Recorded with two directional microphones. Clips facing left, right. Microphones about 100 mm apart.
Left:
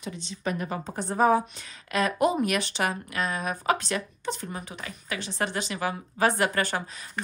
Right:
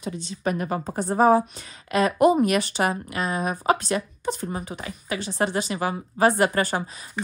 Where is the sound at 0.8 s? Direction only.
40° right (ahead or behind).